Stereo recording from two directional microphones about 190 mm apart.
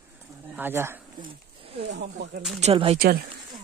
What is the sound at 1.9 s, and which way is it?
Speech, 55° right (ahead or behind).